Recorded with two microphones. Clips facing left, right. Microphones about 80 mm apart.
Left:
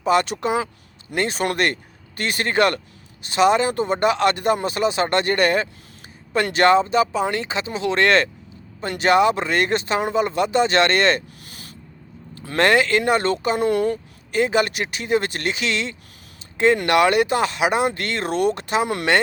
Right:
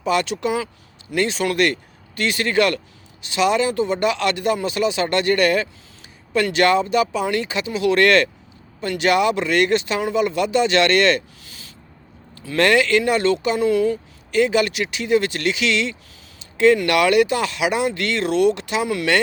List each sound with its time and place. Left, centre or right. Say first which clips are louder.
0.0 s speech: left 1 dB; left
12.5 s speech: right 1 dB; left
14.3 s speech: right 2 dB; left